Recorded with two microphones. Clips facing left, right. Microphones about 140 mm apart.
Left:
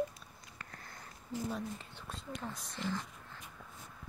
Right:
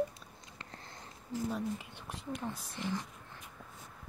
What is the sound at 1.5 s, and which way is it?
Speech, 10° right (ahead or behind).